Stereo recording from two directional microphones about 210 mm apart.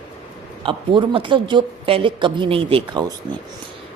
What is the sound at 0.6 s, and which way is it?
Speech, 25° right (ahead or behind).